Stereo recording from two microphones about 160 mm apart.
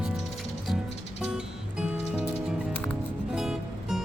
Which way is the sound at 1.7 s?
5° right (ahead or behind).